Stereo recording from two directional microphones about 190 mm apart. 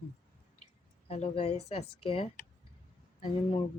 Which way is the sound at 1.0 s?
30° left (ahead or behind).